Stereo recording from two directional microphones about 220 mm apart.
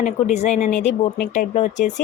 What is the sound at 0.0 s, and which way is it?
Speech, 35° left (ahead or behind).